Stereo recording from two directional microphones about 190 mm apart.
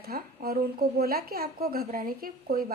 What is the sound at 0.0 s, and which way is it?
A woman's voice, 55° right (ahead or behind).